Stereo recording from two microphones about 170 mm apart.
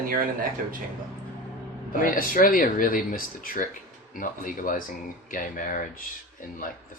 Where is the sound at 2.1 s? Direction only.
55° left (ahead or behind).